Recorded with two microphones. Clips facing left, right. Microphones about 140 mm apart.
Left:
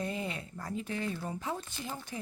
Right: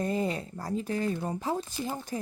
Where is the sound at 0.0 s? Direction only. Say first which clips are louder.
Right 7 dB; 40° right (ahead or behind).